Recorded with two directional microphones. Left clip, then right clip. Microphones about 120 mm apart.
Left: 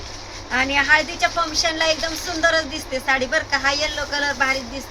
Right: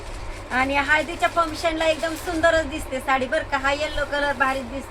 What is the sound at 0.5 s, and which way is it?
Speech, 5° left (ahead or behind).